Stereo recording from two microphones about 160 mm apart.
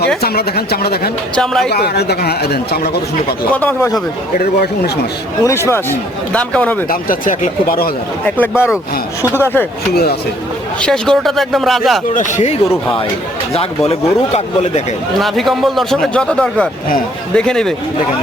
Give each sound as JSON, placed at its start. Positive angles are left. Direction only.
{"t": 0.2, "sound": "a woman's voice", "side_deg": 80}
{"t": 1.4, "sound": "speech", "side_deg": 5}
{"t": 1.7, "sound": "speech", "side_deg": 90}
{"t": 3.5, "sound": "speech", "side_deg": 10}
{"t": 4.4, "sound": "a woman's voice", "side_deg": 75}
{"t": 5.4, "sound": "speech", "side_deg": 20}
{"t": 6.8, "sound": "speech", "side_deg": 60}
{"t": 8.4, "sound": "speech", "side_deg": 15}
{"t": 9.2, "sound": "speech", "side_deg": -15}
{"t": 9.9, "sound": "a woman's voice", "side_deg": 75}
{"t": 10.8, "sound": "speech", "side_deg": 5}
{"t": 12.1, "sound": "speech", "side_deg": 50}
{"t": 15.2, "sound": "speech", "side_deg": 0}